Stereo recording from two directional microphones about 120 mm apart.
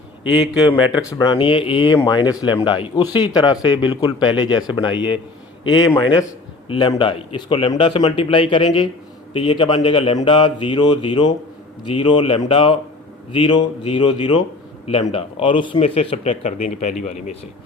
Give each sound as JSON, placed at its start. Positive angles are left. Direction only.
{"t": 0.3, "sound": "a man's voice", "side_deg": -5}
{"t": 0.9, "sound": "a man's voice", "side_deg": 35}
{"t": 2.0, "sound": "a man's voice", "side_deg": 35}